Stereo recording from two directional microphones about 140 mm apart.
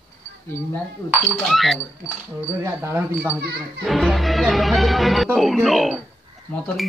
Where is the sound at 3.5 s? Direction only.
Centre (ahead or behind).